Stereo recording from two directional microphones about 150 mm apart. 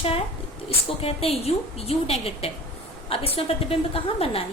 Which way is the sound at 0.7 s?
40° left (ahead or behind).